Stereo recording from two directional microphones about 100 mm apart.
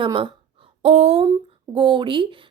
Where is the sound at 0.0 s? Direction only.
55° right (ahead or behind).